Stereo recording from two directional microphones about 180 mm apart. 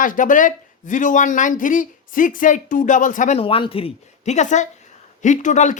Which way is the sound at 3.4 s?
30° left (ahead or behind).